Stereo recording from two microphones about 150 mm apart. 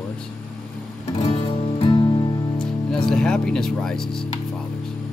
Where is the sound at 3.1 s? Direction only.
5° left (ahead or behind).